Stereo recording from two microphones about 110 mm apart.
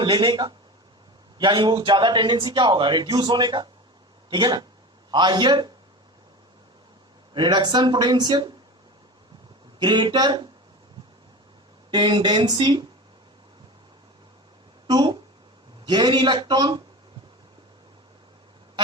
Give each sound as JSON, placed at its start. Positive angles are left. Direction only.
{"t": 0.0, "sound": "a man's voice", "side_deg": -45}
{"t": 7.3, "sound": "a man's voice", "side_deg": -45}
{"t": 9.8, "sound": "a man's voice", "side_deg": -45}
{"t": 11.9, "sound": "a man's voice", "side_deg": -45}
{"t": 14.8, "sound": "a man's voice", "side_deg": -45}